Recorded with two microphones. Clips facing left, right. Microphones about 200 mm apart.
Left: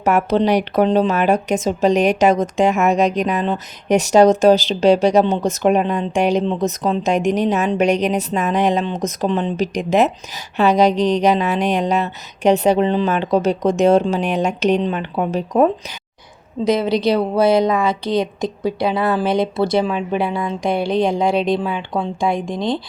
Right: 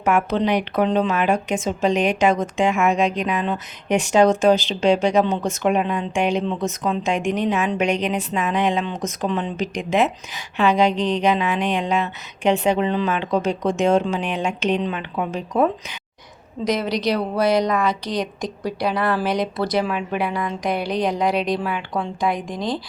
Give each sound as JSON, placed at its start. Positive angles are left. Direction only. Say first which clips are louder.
{"t": 0.0, "sound": "speech", "louder": "left 4 dB", "side_deg": 40}
{"t": 16.6, "sound": "speech", "louder": "left 5 dB", "side_deg": 25}